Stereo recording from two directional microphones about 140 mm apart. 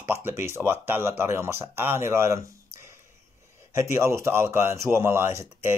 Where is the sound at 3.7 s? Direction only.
20° right (ahead or behind).